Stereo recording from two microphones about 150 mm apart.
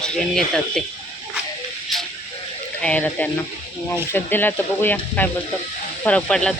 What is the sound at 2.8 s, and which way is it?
Speech, 10° left (ahead or behind).